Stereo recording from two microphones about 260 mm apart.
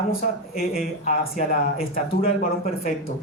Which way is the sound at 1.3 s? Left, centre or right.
Left.